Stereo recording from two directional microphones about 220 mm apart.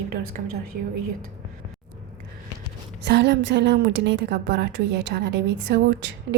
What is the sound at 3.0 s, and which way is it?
A woman's voice, 50° right (ahead or behind).